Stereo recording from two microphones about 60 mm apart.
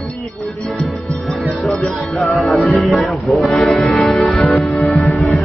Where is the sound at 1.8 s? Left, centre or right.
Centre.